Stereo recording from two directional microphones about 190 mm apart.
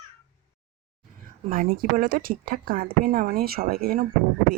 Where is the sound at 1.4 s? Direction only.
40° right (ahead or behind).